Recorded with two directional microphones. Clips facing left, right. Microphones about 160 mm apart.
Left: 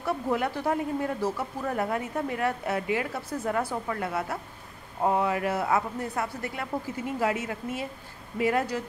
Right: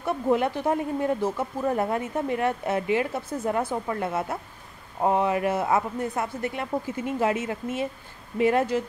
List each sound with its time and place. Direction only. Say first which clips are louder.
0.0 s speech: right 4 dB; 25° right (ahead or behind)